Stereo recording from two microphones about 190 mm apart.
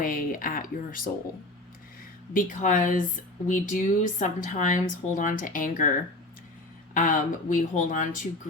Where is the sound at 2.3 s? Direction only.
45° left (ahead or behind).